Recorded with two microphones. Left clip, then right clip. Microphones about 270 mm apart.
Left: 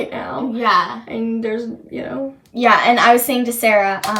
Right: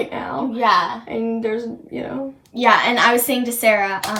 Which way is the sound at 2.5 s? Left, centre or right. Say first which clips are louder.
Left 2 dB; centre.